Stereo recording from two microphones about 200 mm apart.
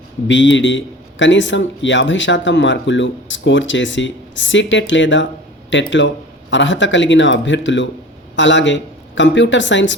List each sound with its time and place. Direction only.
0.3 s a man's voice: 65° left (ahead or behind)